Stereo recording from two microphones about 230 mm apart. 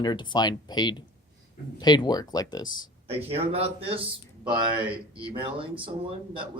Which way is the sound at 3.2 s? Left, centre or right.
Right.